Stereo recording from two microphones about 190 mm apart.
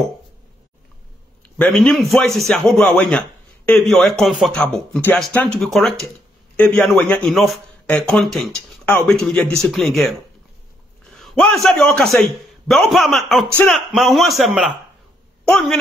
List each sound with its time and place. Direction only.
1.4 s a man's voice: 5° left (ahead or behind)